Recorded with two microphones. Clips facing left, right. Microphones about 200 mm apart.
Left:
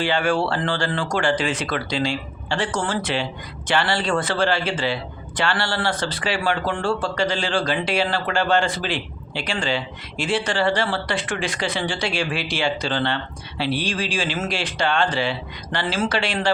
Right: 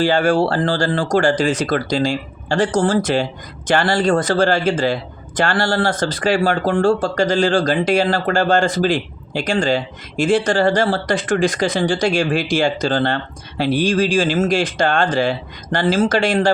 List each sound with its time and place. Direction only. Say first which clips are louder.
0.0 s speech: right 6 dB; 40° right (ahead or behind)